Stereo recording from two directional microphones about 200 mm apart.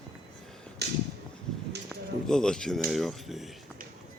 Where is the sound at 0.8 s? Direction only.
55° right (ahead or behind).